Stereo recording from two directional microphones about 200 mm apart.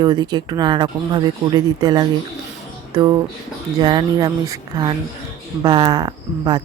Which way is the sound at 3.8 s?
20° right (ahead or behind).